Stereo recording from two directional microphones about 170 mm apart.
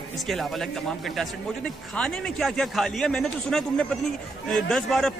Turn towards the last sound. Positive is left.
turn(degrees=5)  # may be behind; listen again after turning